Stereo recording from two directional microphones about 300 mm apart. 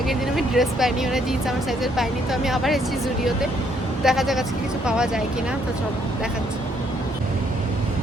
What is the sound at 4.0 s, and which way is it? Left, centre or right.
Speech, centre.